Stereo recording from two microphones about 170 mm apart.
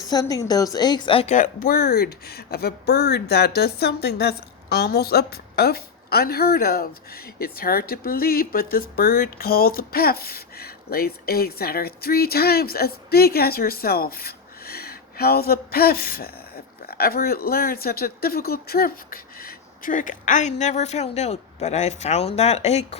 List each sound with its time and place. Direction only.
0.1 s a woman's voice: 20° left (ahead or behind); by 23.0 s 40° left (ahead or behind)